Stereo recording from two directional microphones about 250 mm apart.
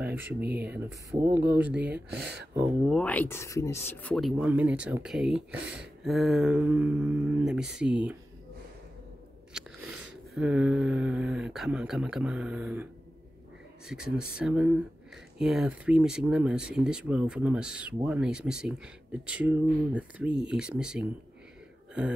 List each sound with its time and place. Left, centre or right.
0.0 s a sound: centre
0.4 s speech: centre
2.0 s speech: right
2.9 s speech: centre
10.3 s speech: centre
13.8 s speech: centre